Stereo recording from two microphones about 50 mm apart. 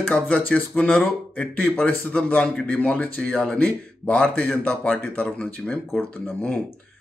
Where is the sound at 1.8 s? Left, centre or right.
Left.